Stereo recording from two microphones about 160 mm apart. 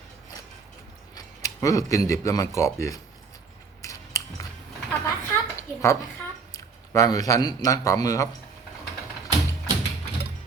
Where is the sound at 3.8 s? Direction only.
20° left (ahead or behind).